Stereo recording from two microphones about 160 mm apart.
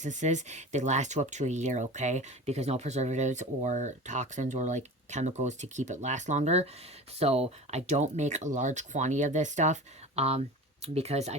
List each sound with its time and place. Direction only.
0.0 s speech: 50° right (ahead or behind)